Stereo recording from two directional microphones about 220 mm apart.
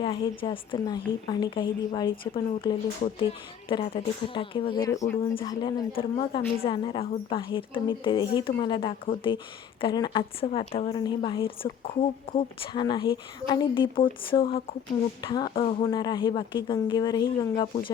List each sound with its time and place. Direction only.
0.0 s a woman's voice: 20° left (ahead or behind)